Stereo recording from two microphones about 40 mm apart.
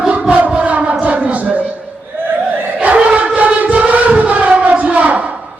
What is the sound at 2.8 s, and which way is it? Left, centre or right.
Crowd, right.